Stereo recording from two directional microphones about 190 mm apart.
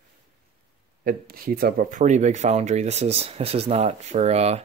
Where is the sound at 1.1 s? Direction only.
50° right (ahead or behind).